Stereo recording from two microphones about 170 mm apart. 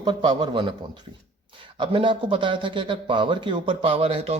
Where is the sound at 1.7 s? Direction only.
30° right (ahead or behind).